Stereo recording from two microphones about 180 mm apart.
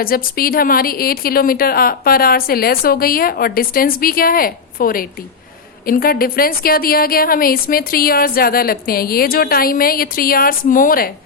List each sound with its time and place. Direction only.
0.0 s a woman's voice: 55° left (ahead or behind)